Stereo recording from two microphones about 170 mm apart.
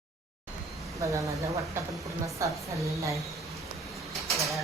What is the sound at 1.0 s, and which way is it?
Speech, 20° right (ahead or behind).